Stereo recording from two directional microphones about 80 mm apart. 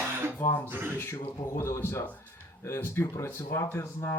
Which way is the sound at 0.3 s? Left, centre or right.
Left.